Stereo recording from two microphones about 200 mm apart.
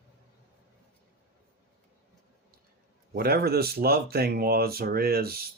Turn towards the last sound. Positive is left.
turn(degrees=-50)  # may be behind; listen again after turning